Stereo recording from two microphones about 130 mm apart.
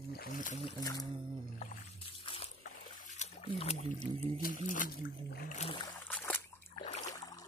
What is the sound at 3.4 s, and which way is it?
Speech, 50° left (ahead or behind).